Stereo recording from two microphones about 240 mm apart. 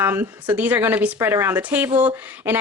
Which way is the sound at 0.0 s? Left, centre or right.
Centre.